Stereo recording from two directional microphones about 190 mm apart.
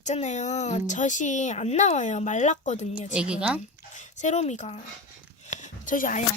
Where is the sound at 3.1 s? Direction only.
5° right (ahead or behind).